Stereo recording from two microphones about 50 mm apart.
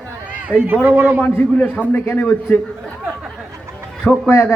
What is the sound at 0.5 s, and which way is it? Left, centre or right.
Speech, left.